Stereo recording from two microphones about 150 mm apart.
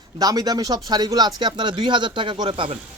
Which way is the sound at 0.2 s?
25° right (ahead or behind).